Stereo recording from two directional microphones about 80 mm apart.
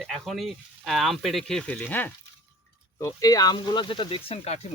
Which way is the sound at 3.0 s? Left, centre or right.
Left.